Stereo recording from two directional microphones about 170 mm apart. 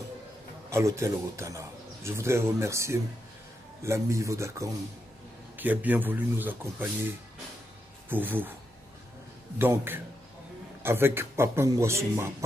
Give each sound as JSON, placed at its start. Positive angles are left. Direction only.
{"t": 0.7, "sound": "speech", "side_deg": -15}
{"t": 8.1, "sound": "speech", "side_deg": -10}
{"t": 9.6, "sound": "speech", "side_deg": -15}